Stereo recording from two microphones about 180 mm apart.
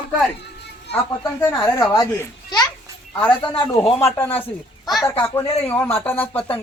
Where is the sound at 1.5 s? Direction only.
20° left (ahead or behind).